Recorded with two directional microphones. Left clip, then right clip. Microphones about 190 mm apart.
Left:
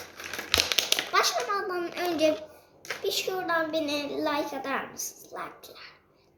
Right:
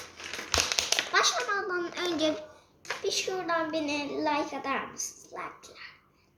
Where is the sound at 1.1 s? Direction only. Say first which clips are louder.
Even; 10° right (ahead or behind).